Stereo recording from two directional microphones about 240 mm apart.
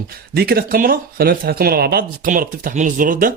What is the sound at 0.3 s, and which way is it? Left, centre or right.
A man's voice, right.